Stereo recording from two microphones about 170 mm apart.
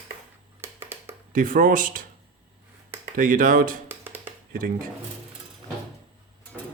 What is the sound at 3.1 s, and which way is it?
Speech, 55° right (ahead or behind).